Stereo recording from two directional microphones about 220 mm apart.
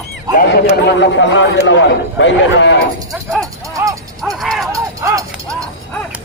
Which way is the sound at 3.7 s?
15° right (ahead or behind).